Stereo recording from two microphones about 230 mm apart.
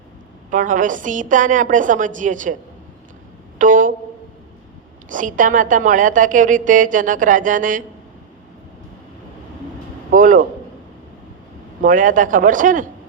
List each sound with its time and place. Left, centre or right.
0.5 s a woman's voice: right
3.6 s a sound: right
5.0 s a woman's voice: right
10.1 s a man's voice: right
11.8 s a woman's voice: right